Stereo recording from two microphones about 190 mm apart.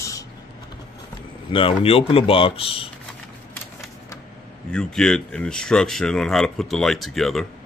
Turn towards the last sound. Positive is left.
turn(degrees=0)  # may be behind; listen again after turning